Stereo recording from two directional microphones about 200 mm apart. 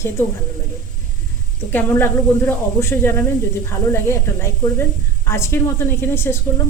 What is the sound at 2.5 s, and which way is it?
A woman's voice, 10° left (ahead or behind).